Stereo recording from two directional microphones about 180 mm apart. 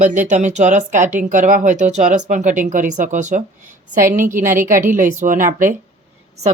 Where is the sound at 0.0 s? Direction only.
45° right (ahead or behind).